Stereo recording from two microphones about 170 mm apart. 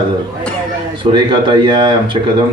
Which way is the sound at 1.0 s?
25° right (ahead or behind).